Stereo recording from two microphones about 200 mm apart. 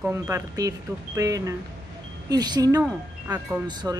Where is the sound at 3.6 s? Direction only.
20° right (ahead or behind).